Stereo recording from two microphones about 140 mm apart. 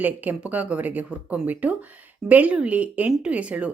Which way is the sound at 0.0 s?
10° right (ahead or behind).